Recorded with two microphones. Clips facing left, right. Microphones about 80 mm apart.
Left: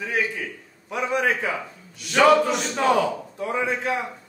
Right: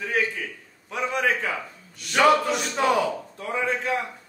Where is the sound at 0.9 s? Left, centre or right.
Centre.